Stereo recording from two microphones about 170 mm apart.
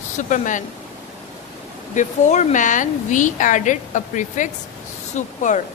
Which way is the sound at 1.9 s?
45° left (ahead or behind).